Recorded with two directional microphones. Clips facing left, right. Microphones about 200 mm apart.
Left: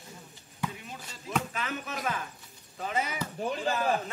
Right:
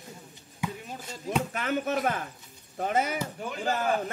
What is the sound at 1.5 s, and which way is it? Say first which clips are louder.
Speech: right 8 dB; 60° right (ahead or behind).